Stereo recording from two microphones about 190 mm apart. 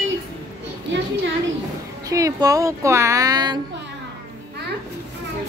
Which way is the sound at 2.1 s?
20° right (ahead or behind).